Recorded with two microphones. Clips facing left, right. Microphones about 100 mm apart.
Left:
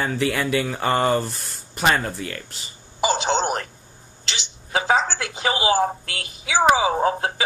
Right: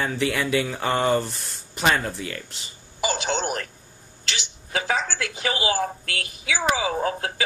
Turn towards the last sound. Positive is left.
turn(degrees=30)  # may be behind; listen again after turning